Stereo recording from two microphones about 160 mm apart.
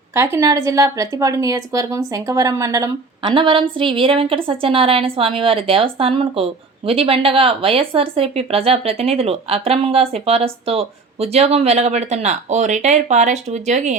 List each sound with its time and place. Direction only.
0.1 s a woman's voice: 15° right (ahead or behind)
3.2 s a woman's voice: 30° right (ahead or behind); by 13.9 s 45° right (ahead or behind)